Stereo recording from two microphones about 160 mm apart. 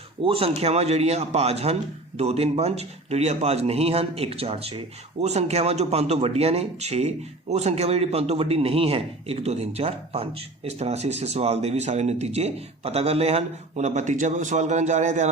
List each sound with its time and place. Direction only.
0.3 s a man's voice: 35° right (ahead or behind)